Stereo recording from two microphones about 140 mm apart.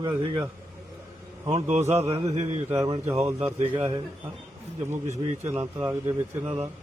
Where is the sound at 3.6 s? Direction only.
40° right (ahead or behind).